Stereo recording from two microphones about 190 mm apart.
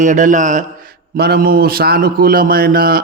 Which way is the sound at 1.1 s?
55° right (ahead or behind).